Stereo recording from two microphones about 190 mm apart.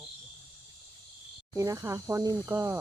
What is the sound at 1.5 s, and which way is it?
Speech, 15° right (ahead or behind).